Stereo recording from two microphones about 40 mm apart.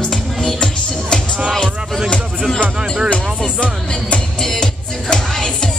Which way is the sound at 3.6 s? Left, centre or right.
Left.